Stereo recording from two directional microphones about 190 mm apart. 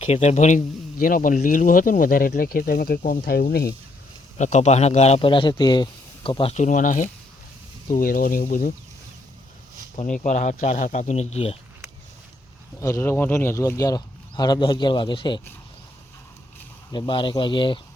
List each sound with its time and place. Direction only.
0.0 s speech: 35° left (ahead or behind); by 3.2 s 50° left (ahead or behind)
4.4 s a man's voice: 40° left (ahead or behind)
10.2 s a man's voice: 40° left (ahead or behind)
12.8 s speech: 15° left (ahead or behind)
16.9 s speech: 25° left (ahead or behind)